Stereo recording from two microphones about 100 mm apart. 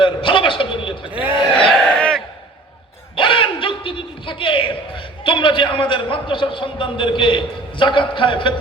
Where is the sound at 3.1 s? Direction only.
60° left (ahead or behind).